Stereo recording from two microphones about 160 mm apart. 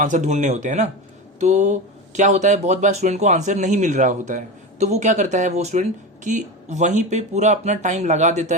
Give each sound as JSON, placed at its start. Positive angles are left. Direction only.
{"t": 0.0, "sound": "speech", "side_deg": -50}